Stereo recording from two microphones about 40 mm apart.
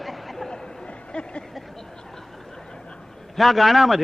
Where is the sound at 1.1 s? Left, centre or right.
Left.